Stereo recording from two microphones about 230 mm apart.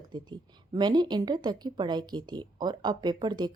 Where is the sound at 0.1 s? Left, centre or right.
Centre.